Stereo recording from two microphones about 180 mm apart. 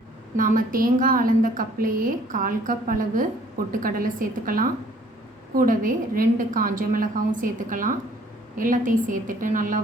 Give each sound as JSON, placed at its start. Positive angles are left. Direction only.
{"t": 0.3, "sound": "a woman's voice", "side_deg": -50}